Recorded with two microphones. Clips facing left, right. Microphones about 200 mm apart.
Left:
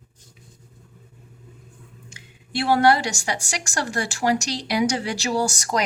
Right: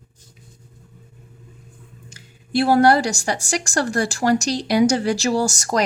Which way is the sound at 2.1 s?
40° right (ahead or behind).